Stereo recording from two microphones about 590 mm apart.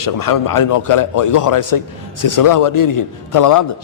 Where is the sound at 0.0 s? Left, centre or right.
Left.